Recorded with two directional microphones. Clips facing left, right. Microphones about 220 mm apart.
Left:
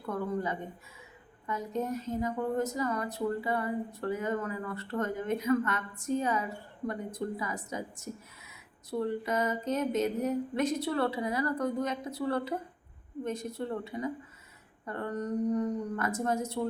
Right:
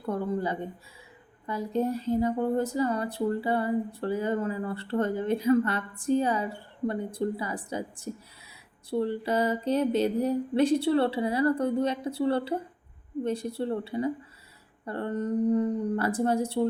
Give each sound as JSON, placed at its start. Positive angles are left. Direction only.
{"t": 0.0, "sound": "speech", "side_deg": -30}